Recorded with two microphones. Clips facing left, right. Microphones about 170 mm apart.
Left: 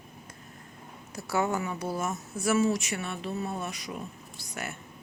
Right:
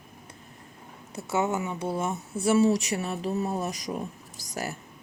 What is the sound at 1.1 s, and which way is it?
Speech, 20° right (ahead or behind).